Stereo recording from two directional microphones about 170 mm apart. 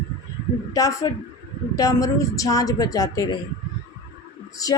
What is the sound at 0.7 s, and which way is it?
A woman's voice, 20° left (ahead or behind).